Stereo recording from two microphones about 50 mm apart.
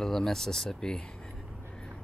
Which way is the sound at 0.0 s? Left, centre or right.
Centre.